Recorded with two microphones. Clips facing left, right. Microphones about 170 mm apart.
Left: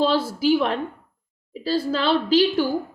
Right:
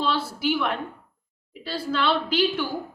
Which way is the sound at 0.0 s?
35° left (ahead or behind).